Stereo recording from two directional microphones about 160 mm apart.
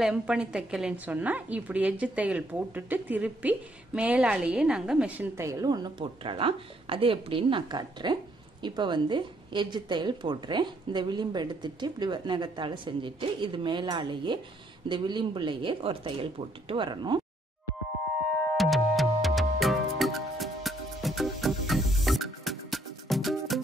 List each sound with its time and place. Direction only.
0.0 s a woman's voice: 5° right (ahead or behind); by 17.2 s 30° right (ahead or behind)
18.6 s music: centre (ahead or behind)